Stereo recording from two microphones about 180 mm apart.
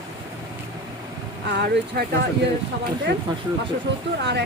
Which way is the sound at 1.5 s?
75° right (ahead or behind).